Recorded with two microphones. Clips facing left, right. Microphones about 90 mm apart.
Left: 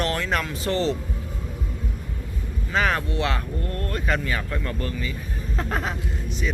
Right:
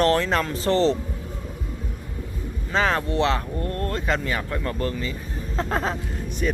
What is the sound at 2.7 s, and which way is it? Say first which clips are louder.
Speech: right 2 dB; 30° right (ahead or behind).